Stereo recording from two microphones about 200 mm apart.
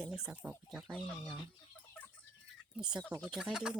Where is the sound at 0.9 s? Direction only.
5° left (ahead or behind).